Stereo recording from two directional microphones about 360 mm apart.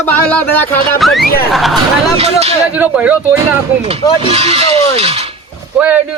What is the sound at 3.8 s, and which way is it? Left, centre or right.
Speech, centre.